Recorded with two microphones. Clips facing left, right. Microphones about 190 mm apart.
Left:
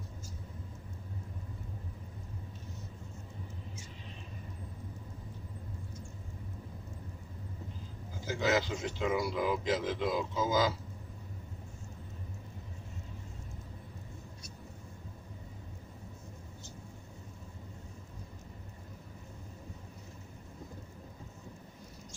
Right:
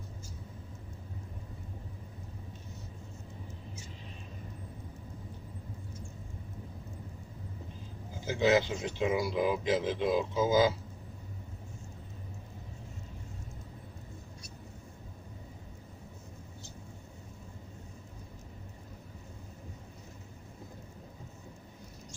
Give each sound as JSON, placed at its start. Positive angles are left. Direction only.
{"t": 8.3, "sound": "speech", "side_deg": -20}